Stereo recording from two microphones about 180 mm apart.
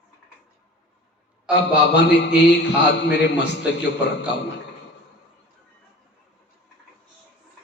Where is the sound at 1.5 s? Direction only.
70° left (ahead or behind).